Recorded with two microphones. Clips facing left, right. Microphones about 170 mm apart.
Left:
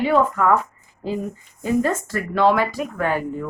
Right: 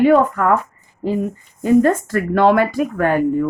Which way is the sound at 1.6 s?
55° right (ahead or behind).